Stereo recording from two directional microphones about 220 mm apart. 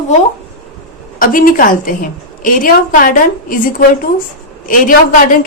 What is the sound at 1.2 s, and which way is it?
A woman's voice, 40° left (ahead or behind).